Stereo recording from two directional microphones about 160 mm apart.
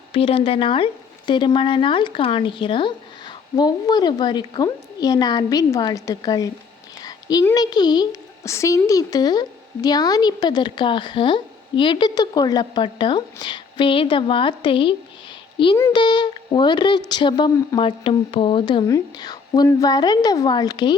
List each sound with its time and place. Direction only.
0.1 s a woman's voice: 35° left (ahead or behind)
7.0 s a sound: 25° left (ahead or behind)
7.5 s a woman's voice: 25° left (ahead or behind)